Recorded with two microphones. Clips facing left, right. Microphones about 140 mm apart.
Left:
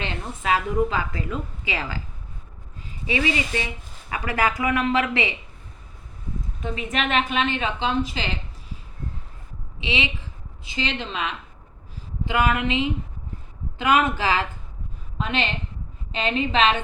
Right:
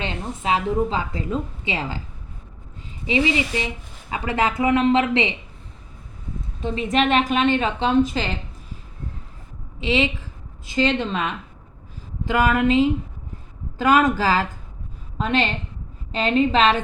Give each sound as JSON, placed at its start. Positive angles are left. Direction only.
{"t": 0.0, "sound": "a woman's voice", "side_deg": -25}
{"t": 3.1, "sound": "a woman's voice", "side_deg": -20}
{"t": 6.6, "sound": "a woman's voice", "side_deg": -30}
{"t": 9.8, "sound": "a sound", "side_deg": -45}
{"t": 13.7, "sound": "a woman's voice", "side_deg": -40}